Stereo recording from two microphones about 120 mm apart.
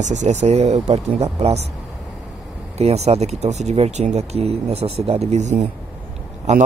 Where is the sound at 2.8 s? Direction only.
60° right (ahead or behind).